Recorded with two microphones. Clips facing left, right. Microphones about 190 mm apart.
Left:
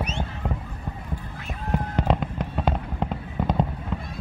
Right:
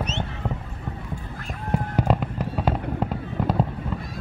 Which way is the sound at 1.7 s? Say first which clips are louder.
Right 1 dB; 10° right (ahead or behind).